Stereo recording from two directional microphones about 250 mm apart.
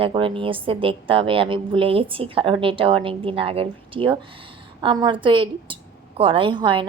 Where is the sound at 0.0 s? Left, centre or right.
Right.